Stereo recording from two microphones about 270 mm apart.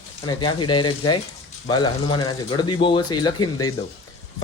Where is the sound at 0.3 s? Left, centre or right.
Centre.